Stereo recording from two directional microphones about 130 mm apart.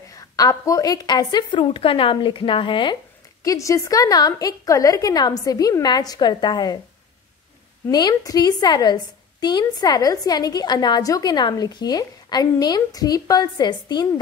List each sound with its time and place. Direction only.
0.1 s a woman's voice: 25° left (ahead or behind)
3.4 s a woman's voice: 25° left (ahead or behind)
7.9 s a woman's voice: 30° left (ahead or behind)